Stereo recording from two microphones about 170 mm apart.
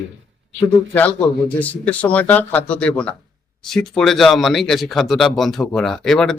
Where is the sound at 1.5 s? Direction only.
10° left (ahead or behind).